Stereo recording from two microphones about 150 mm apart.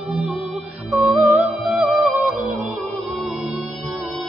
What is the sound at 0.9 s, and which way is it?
Music, centre (ahead or behind).